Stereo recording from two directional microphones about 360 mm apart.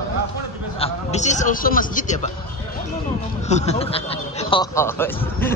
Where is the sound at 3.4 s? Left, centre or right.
Centre.